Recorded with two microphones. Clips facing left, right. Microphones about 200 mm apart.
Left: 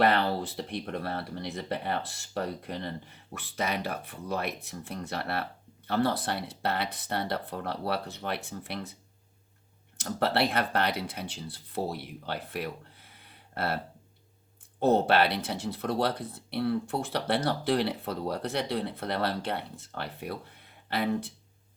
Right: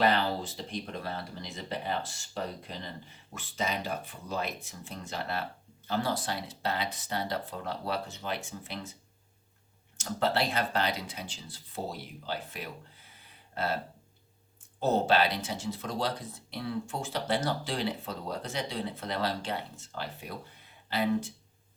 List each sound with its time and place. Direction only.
0.0 s speech: 60° left (ahead or behind)
10.0 s speech: 60° left (ahead or behind)
14.8 s speech: 60° left (ahead or behind)